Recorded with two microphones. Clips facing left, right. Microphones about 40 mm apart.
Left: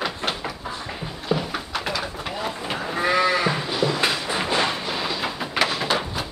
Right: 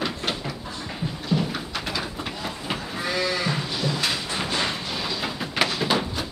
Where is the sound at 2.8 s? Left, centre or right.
Left.